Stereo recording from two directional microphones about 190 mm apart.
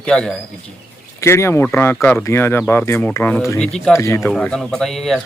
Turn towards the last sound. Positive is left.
turn(degrees=0)  # may be behind; listen again after turning